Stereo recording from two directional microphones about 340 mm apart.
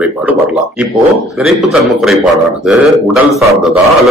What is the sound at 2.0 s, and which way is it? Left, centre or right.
A man's voice, centre.